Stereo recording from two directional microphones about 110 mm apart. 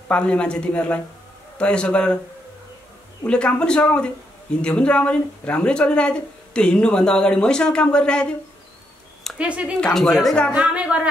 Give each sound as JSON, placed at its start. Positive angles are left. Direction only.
{"t": 0.1, "sound": "speech", "side_deg": 10}
{"t": 3.3, "sound": "speech", "side_deg": 10}
{"t": 9.4, "sound": "speech", "side_deg": -10}
{"t": 9.8, "sound": "speech", "side_deg": 5}
{"t": 10.5, "sound": "speech", "side_deg": -10}